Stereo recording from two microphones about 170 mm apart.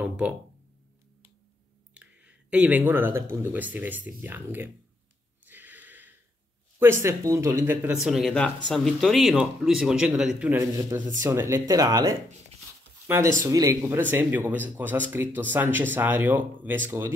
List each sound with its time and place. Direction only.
0.0 s speech: 5° right (ahead or behind)
2.0 s speech: 5° right (ahead or behind)
5.4 s a sound: 10° right (ahead or behind)
6.8 s speech: 15° right (ahead or behind)
8.0 s speech: centre (ahead or behind)
10.8 s speech: 15° right (ahead or behind)